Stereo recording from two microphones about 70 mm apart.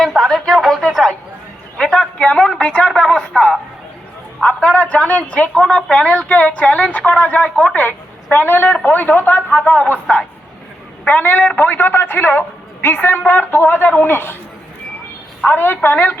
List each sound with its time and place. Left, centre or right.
0.2 s a woman's voice: centre
1.8 s a sound: centre
2.6 s speech: centre; by 14.3 s left
15.4 s speech: left